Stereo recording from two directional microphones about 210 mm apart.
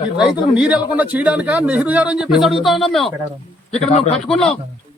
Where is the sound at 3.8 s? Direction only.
30° left (ahead or behind).